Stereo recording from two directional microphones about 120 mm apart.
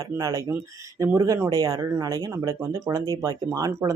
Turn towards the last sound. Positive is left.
turn(degrees=-30)  # may be behind; listen again after turning